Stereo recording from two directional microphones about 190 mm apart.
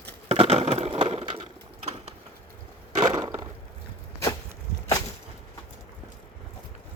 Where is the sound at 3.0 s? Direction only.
20° right (ahead or behind).